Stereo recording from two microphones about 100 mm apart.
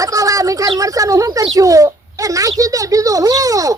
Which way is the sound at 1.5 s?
35° right (ahead or behind).